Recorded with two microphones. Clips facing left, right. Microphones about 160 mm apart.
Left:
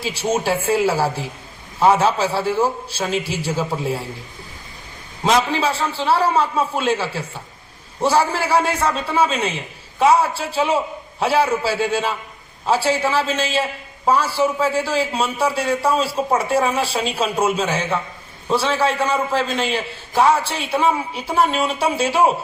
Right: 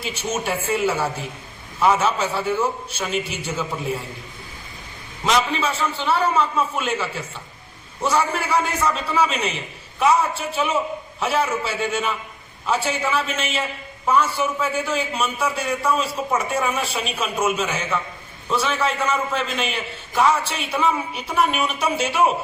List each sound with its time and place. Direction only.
0.1 s a man's voice: 30° left (ahead or behind)
5.2 s a man's voice: 30° left (ahead or behind)